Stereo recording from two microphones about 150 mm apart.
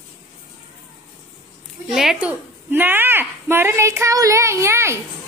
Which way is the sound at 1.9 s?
5° right (ahead or behind).